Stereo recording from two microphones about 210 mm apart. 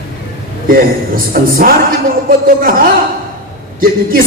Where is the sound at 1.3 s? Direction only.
45° right (ahead or behind).